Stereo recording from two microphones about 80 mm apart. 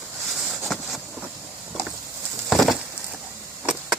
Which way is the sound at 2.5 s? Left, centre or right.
Centre.